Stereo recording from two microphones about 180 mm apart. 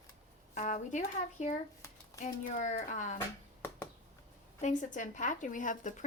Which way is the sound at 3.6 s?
10° left (ahead or behind).